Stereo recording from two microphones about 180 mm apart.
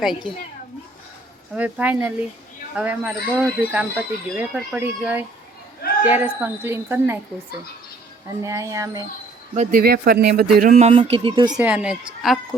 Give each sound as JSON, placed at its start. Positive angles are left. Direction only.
{"t": 1.5, "sound": "speech", "side_deg": -10}
{"t": 8.4, "sound": "speech", "side_deg": -20}
{"t": 9.6, "sound": "speech", "side_deg": -55}
{"t": 10.7, "sound": "speech", "side_deg": -35}
{"t": 11.5, "sound": "a woman's voice", "side_deg": -5}